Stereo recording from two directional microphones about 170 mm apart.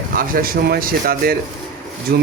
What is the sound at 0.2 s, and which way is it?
Speech, 60° right (ahead or behind).